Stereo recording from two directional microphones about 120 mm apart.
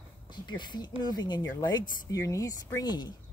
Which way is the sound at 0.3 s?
40° left (ahead or behind).